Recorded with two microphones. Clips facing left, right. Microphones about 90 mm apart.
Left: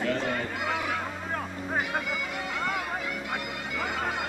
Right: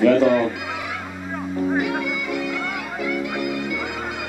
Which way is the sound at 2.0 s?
90° right.